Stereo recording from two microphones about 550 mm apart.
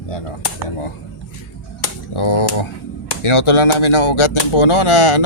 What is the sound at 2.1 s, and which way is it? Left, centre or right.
Speech, left.